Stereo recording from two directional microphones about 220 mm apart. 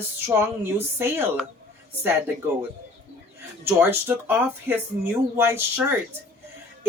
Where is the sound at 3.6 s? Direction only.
10° right (ahead or behind).